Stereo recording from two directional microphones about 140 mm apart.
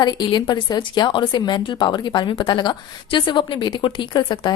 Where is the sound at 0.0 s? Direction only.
30° left (ahead or behind).